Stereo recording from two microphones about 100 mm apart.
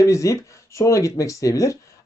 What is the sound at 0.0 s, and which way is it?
Speech, 30° left (ahead or behind).